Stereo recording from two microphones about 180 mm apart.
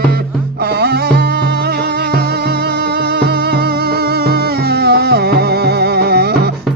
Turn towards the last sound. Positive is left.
turn(degrees=-60)  # may be behind; listen again after turning